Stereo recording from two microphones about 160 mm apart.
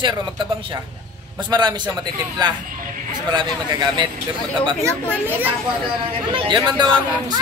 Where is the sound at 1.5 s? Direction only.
25° right (ahead or behind).